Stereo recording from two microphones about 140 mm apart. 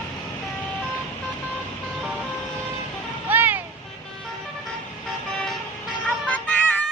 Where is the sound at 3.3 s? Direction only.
15° right (ahead or behind).